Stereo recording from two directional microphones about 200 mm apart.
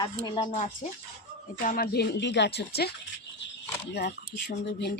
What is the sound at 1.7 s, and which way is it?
Speech, 50° left (ahead or behind).